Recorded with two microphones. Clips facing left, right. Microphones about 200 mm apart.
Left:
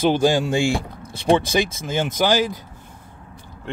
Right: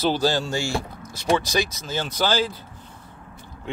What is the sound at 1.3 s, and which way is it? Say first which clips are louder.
Speech: left 4 dB; 25° left (ahead or behind).